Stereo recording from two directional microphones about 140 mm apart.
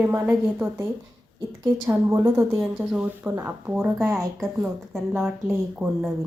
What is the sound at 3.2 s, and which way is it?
Speech, 15° right (ahead or behind).